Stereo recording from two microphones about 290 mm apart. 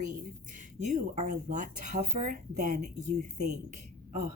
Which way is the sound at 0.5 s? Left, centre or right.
Right.